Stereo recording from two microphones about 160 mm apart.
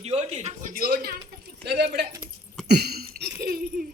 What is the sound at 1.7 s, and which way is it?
Speech, 90° right.